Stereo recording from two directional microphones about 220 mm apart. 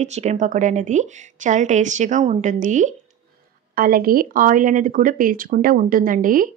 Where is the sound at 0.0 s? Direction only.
30° right (ahead or behind).